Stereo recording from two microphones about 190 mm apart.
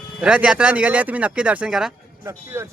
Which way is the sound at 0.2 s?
5° right (ahead or behind).